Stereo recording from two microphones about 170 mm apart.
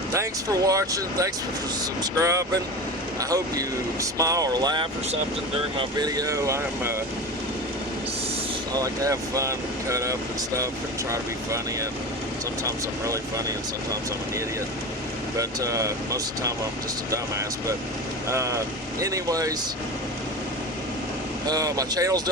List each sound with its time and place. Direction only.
0.1 s speech: 20° right (ahead or behind)
6.0 s speech: 20° right (ahead or behind)
8.7 s speech: 20° right (ahead or behind)
15.4 s speech: 20° right (ahead or behind)
18.3 s speech: 20° right (ahead or behind)
21.4 s speech: 20° right (ahead or behind)